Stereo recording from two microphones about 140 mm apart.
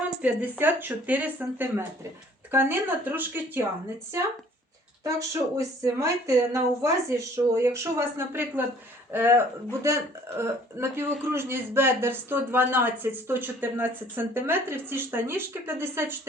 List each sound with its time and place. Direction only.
0.2 s speech: 10° right (ahead or behind)
5.0 s speech: 25° right (ahead or behind)